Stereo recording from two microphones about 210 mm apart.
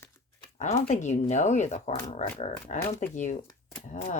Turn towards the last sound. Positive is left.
turn(degrees=35)  # may be behind; listen again after turning